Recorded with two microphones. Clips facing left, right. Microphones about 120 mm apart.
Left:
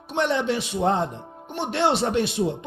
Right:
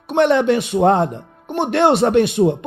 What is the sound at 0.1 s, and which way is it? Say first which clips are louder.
A man's voice: right 9 dB; 60° right (ahead or behind).